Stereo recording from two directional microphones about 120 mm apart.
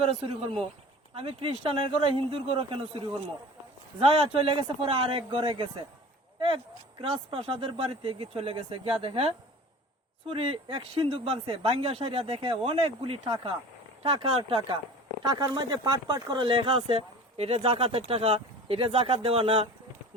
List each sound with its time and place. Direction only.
0.0 s speech: 55° right (ahead or behind)
4.0 s speech: 50° right (ahead or behind)
7.0 s speech: 50° right (ahead or behind)
15.2 s speech: 30° right (ahead or behind); by 19.6 s 50° right (ahead or behind)